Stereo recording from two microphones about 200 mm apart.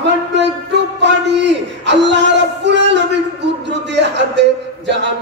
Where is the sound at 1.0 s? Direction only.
60° right (ahead or behind).